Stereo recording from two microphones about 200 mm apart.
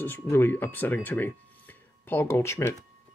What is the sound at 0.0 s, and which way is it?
Speech, 10° left (ahead or behind).